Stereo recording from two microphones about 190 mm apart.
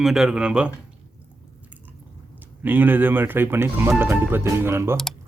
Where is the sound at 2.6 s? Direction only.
10° right (ahead or behind).